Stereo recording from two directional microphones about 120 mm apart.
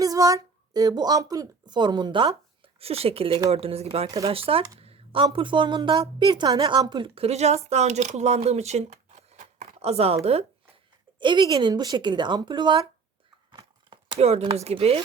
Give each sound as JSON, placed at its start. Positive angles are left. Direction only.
{"t": 0.0, "sound": "speech", "side_deg": -30}
{"t": 2.7, "sound": "a woman's voice", "side_deg": -55}
{"t": 11.2, "sound": "speech", "side_deg": -40}
{"t": 13.5, "sound": "a sound", "side_deg": -40}
{"t": 14.2, "sound": "speech", "side_deg": -60}